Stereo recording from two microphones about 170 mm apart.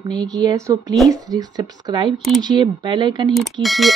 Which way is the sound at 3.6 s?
Centre (ahead or behind).